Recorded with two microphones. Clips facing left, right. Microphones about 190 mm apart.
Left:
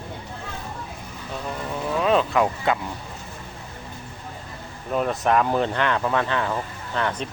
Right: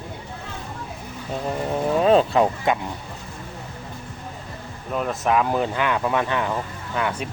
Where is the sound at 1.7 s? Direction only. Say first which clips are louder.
Right 4 dB; 35° right (ahead or behind).